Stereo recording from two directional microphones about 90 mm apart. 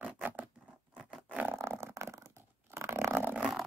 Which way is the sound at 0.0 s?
15° right (ahead or behind).